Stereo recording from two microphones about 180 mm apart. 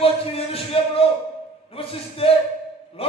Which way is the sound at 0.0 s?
35° left (ahead or behind).